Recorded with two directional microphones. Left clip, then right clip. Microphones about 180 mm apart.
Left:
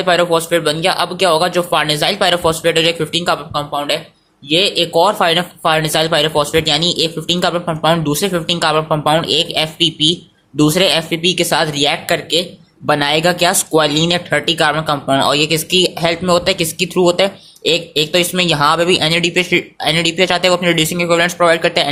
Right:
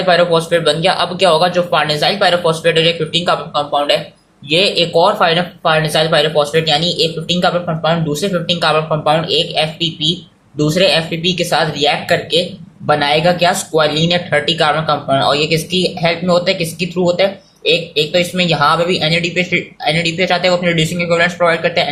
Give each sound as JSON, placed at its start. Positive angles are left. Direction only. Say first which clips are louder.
{"t": 0.0, "sound": "speech", "louder": "right 2 dB", "side_deg": 40}